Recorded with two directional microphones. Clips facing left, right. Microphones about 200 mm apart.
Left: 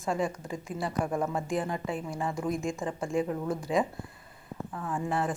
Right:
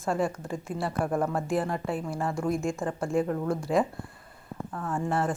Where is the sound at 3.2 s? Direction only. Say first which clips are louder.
Right 3 dB; 20° left (ahead or behind).